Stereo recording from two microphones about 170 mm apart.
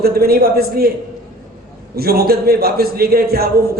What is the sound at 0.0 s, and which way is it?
Speech, 65° right (ahead or behind).